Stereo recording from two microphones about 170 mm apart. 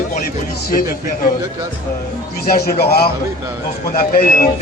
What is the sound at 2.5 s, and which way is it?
A man's voice, 65° left (ahead or behind).